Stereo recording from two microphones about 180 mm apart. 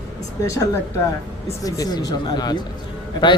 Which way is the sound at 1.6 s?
20° left (ahead or behind).